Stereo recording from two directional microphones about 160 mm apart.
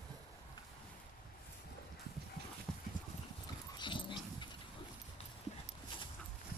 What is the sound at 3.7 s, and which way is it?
Dog, 30° left (ahead or behind).